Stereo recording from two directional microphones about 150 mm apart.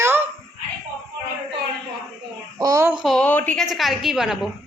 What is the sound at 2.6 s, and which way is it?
Speech, 20° right (ahead or behind).